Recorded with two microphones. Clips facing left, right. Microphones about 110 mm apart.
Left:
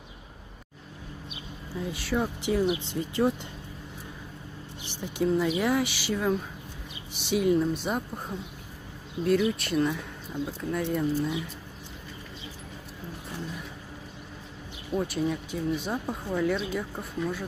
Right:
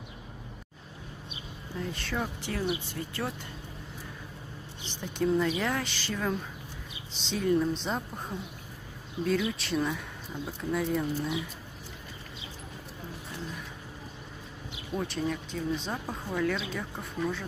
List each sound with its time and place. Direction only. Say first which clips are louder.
1.8 s speech: left 4 dB; 10° left (ahead or behind)
4.8 s speech: left 2 dB; 10° left (ahead or behind)
9.2 s speech: left 4 dB; centre (ahead or behind)
15.0 s speech: left 3 dB; 5° left (ahead or behind)